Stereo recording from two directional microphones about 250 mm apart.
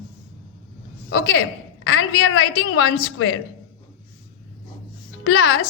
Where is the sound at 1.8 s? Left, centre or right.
Left.